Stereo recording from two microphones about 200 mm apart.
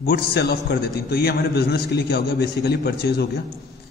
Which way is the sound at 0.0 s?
55° left (ahead or behind).